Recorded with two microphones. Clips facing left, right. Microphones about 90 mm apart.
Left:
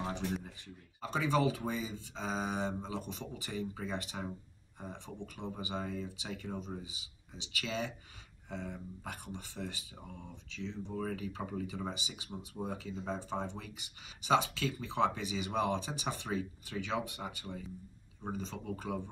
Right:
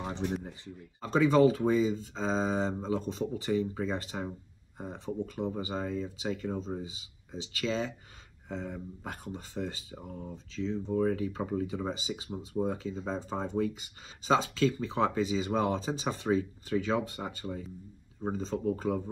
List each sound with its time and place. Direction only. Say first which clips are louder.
1.0 s speech: right 8 dB; 35° right (ahead or behind)